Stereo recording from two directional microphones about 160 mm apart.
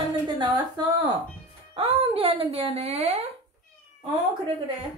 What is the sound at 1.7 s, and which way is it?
Speech, 35° right (ahead or behind).